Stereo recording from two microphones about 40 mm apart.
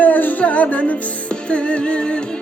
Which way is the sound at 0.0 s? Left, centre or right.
Left.